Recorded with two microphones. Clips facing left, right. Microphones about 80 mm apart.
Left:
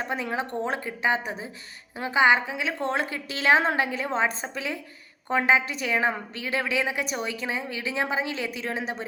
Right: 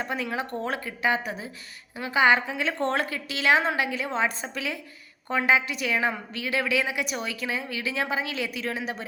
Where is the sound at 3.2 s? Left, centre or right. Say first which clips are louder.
Left 2 dB; left.